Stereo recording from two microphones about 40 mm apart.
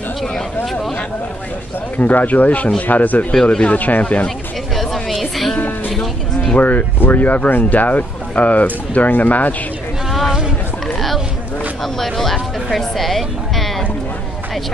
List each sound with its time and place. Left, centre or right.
2.0 s speech: left
5.2 s music: centre
6.6 s speech: left
11.8 s a sound: centre
12.7 s music: centre